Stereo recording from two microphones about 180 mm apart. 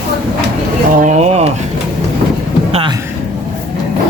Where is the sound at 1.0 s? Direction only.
35° right (ahead or behind).